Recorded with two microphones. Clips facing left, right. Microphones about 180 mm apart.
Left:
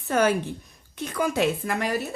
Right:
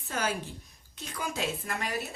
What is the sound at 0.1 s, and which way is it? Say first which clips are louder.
A woman's voice: left 10 dB; 55° left (ahead or behind).